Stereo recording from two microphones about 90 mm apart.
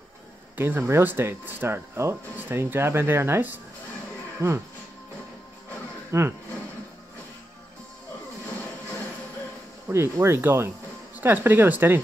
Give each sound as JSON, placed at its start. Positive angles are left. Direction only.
{"t": 0.6, "sound": "speech", "side_deg": -25}
{"t": 6.1, "sound": "speech", "side_deg": -30}
{"t": 9.8, "sound": "speech", "side_deg": -30}